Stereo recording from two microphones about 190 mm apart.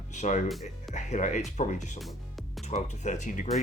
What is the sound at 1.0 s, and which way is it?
Speech, 40° left (ahead or behind).